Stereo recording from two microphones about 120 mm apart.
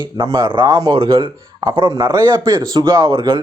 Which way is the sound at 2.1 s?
20° right (ahead or behind).